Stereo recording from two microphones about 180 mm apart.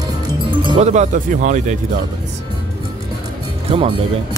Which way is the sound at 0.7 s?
40° right (ahead or behind).